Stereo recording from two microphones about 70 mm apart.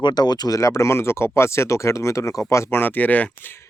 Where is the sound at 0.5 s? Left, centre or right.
Left.